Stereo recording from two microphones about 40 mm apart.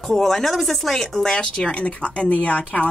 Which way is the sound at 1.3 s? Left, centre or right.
Left.